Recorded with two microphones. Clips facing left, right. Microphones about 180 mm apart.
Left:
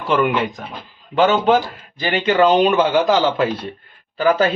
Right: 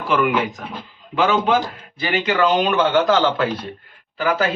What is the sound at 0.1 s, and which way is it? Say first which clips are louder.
Speech: left 1 dB; 35° left (ahead or behind).